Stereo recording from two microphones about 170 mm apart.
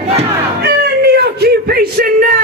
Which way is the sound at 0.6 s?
70° right (ahead or behind).